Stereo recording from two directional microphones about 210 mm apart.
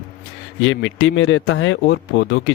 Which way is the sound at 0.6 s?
65° left (ahead or behind).